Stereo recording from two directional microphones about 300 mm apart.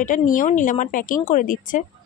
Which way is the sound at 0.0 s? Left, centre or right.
Left.